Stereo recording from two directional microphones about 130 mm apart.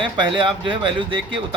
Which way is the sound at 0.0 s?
40° right (ahead or behind).